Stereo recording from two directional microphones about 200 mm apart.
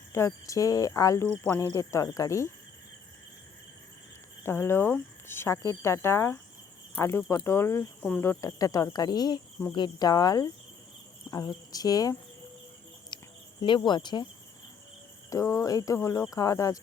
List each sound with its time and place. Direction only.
0.1 s speech: 15° left (ahead or behind)
4.4 s speech: 10° left (ahead or behind)
13.1 s cricket: 20° left (ahead or behind)
13.6 s speech: 25° left (ahead or behind)
15.3 s speech: 15° left (ahead or behind)